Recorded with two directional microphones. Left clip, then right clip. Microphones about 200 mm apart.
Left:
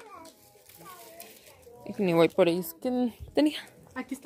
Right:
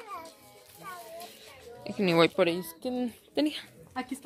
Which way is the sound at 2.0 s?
10° left (ahead or behind).